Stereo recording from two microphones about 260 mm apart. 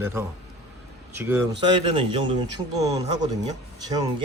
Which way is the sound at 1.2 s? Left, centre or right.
Centre.